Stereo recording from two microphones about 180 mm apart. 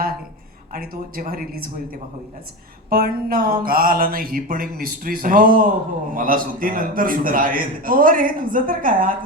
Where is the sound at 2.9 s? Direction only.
55° right (ahead or behind).